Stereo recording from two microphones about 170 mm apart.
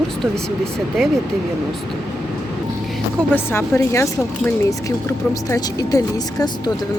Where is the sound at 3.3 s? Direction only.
15° left (ahead or behind).